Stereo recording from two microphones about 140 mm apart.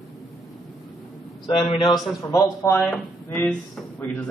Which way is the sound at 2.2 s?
25° left (ahead or behind).